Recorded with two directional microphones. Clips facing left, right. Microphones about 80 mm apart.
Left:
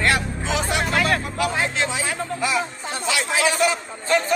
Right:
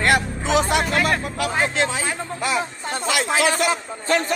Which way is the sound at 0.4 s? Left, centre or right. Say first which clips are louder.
Right 6 dB; right.